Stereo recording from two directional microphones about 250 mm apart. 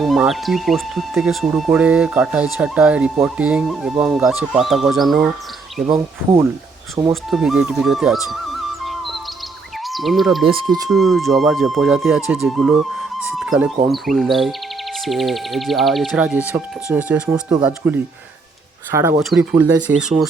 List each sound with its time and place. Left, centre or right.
0.0 s speech: centre
7.1 s speech: centre
8.8 s music: centre
9.8 s speech: centre
10.4 s speech: right
10.8 s speech: centre